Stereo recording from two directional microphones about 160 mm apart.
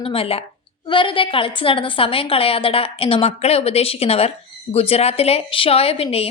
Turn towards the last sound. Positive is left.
turn(degrees=40)  # may be behind; listen again after turning